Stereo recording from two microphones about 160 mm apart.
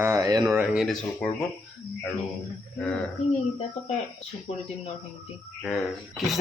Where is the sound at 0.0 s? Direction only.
20° right (ahead or behind).